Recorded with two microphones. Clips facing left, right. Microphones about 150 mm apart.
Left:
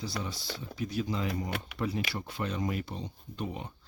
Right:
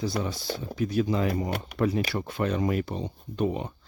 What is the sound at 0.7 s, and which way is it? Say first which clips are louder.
Speech: right 7 dB; 55° right (ahead or behind).